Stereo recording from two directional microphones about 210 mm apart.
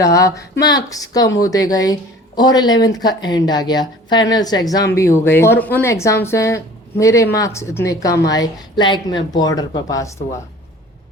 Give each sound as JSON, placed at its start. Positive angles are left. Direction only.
{"t": 0.0, "sound": "speech", "side_deg": 15}